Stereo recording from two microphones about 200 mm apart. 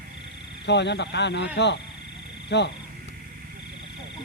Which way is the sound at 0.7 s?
60° left (ahead or behind).